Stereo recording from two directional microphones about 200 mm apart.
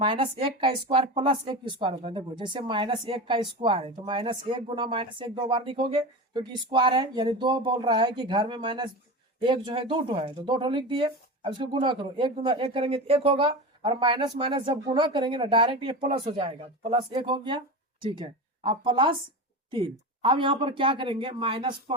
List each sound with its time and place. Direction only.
0.0 s a woman's voice: 25° right (ahead or behind)